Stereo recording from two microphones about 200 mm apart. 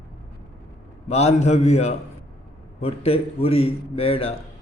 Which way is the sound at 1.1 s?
30° left (ahead or behind).